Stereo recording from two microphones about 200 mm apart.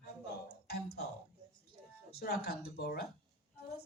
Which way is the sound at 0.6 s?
50° left (ahead or behind).